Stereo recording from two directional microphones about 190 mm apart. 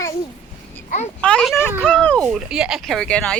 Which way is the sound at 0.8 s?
40° left (ahead or behind).